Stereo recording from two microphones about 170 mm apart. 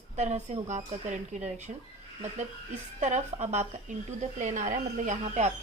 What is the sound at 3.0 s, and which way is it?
A woman's voice, 45° right (ahead or behind).